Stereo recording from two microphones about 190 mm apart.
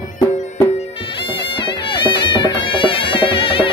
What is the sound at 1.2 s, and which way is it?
Music, 25° left (ahead or behind).